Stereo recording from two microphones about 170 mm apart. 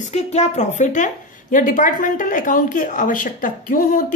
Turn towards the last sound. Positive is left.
turn(degrees=55)  # may be behind; listen again after turning